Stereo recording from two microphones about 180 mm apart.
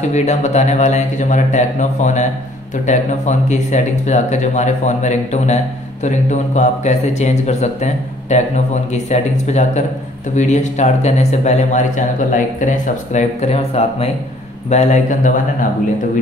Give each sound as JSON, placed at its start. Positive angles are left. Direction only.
{"t": 0.1, "sound": "speech", "side_deg": 40}